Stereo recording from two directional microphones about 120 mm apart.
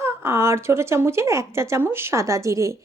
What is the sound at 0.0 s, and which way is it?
Speech, 20° right (ahead or behind).